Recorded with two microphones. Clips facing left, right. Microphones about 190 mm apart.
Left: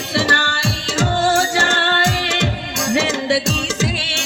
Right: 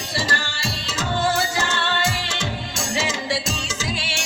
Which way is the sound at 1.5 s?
90° left.